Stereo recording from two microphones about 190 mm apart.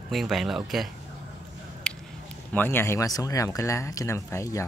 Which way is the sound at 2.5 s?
10° left (ahead or behind).